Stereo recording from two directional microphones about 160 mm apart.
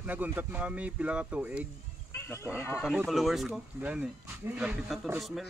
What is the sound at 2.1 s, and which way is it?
Speech, 15° left (ahead or behind).